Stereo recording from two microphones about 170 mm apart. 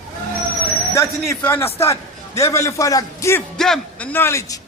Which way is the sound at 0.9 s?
15° left (ahead or behind).